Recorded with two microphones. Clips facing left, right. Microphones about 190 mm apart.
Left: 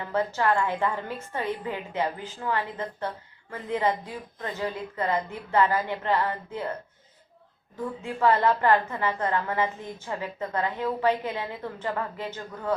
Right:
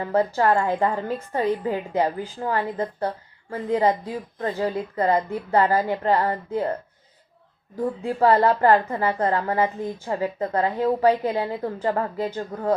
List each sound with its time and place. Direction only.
0.0 s a woman's voice: 40° right (ahead or behind)
7.8 s a woman's voice: 35° right (ahead or behind)